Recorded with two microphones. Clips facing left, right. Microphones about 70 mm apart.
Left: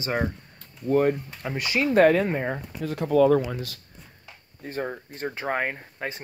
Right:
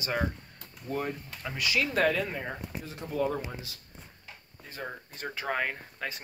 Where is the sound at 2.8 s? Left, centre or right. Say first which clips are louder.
Left 12 dB; left.